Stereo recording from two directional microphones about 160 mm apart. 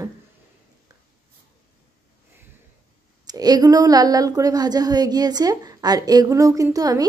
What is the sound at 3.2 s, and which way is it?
A woman's voice, 25° right (ahead or behind).